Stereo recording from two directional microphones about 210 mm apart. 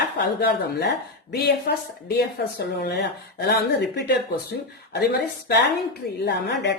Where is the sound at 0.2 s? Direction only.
50° left (ahead or behind).